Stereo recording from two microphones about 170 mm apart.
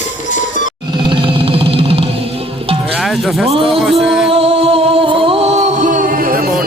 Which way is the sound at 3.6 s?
Centre (ahead or behind).